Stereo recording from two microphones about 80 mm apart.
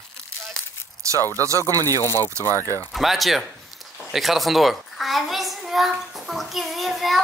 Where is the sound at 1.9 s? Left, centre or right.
Left.